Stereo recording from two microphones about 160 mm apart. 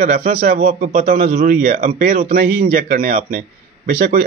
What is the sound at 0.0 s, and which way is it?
A man's voice, 60° right (ahead or behind).